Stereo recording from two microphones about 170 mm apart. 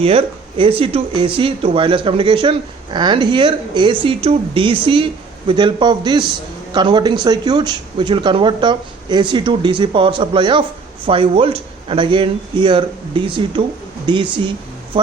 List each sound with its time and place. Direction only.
0.0 s speech: 35° right (ahead or behind)